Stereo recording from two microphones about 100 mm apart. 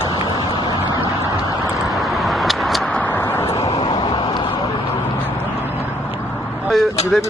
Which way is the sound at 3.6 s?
70° left (ahead or behind).